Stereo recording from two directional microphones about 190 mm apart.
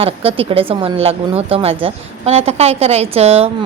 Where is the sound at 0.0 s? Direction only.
30° right (ahead or behind).